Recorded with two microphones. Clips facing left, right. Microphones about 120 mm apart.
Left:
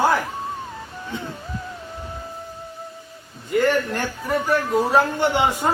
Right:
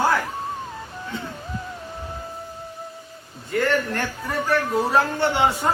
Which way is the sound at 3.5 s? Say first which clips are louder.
Left 3 dB; 15° left (ahead or behind).